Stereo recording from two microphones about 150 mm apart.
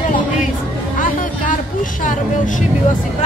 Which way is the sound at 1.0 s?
60° left (ahead or behind).